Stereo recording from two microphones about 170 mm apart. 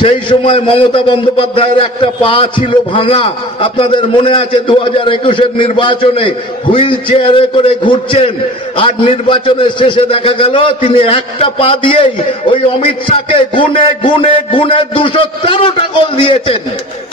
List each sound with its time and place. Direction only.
0.0 s a man's voice: 30° left (ahead or behind)